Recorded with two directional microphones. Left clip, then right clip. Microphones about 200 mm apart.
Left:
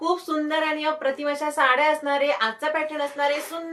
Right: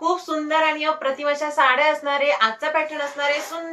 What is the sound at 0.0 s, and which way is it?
A woman's voice, 20° left (ahead or behind).